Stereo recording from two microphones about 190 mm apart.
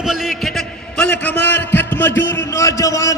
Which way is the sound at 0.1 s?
Centre (ahead or behind).